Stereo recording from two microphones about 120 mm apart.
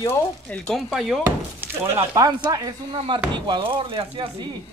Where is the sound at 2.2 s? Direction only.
30° right (ahead or behind).